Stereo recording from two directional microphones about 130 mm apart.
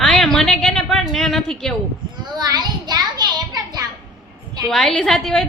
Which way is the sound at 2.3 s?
30° right (ahead or behind).